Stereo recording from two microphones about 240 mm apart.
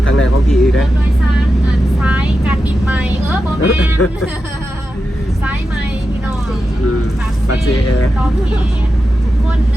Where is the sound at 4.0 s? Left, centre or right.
Left.